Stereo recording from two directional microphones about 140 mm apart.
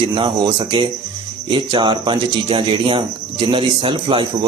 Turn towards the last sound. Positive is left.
turn(degrees=-35)  # may be behind; listen again after turning